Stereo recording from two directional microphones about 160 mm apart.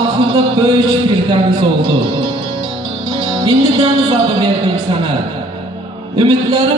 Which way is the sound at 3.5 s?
30° right (ahead or behind).